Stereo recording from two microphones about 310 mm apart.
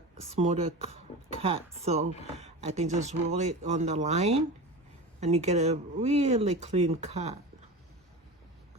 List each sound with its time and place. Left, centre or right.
0.2 s speech: right